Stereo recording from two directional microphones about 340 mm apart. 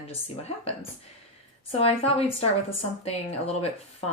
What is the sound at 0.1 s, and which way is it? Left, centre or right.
Speech, centre.